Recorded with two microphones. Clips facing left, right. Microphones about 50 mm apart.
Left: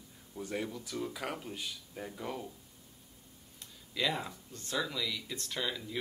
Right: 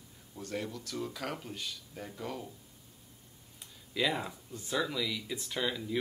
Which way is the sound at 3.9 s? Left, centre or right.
Centre.